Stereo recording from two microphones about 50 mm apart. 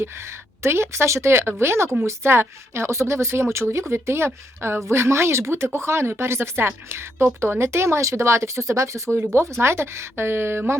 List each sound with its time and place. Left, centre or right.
0.6 s a woman's voice: right
7.4 s speech: right
7.7 s speech: right
9.1 s a woman's voice: right